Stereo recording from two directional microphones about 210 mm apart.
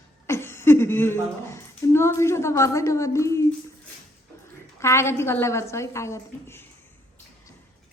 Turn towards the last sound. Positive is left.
turn(degrees=10)  # may be behind; listen again after turning